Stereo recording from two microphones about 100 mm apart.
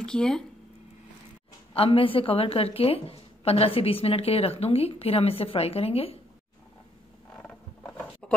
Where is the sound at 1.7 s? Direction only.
70° left (ahead or behind).